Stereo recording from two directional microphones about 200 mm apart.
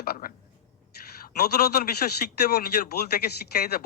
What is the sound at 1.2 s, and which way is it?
A man's voice, 50° left (ahead or behind).